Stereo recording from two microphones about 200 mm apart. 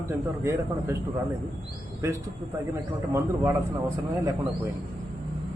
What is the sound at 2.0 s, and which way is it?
A man's voice, 15° right (ahead or behind).